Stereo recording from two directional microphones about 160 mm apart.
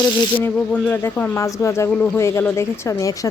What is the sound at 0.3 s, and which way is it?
Speech, 10° left (ahead or behind).